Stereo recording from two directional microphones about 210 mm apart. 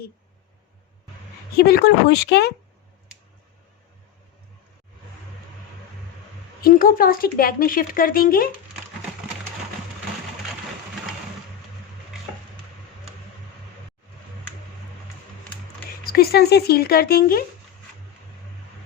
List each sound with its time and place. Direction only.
1.5 s speech: 50° left (ahead or behind)
6.6 s speech: 45° left (ahead or behind)
16.1 s speech: 45° left (ahead or behind)